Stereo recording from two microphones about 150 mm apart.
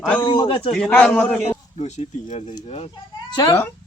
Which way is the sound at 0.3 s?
35° left (ahead or behind).